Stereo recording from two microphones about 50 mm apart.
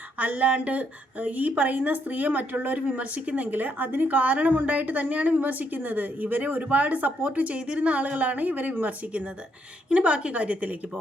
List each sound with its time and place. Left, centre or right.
0.2 s a woman's voice: right